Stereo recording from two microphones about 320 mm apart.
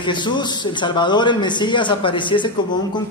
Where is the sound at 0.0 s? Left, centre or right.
Centre.